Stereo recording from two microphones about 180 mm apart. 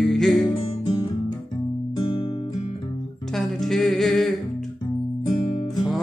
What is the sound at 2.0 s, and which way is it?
Guitar, 30° left (ahead or behind).